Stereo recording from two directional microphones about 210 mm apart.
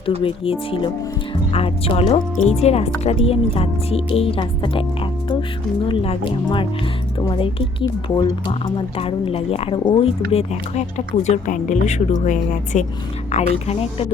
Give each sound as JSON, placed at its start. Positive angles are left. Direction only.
{"t": 0.2, "sound": "a woman's voice", "side_deg": 25}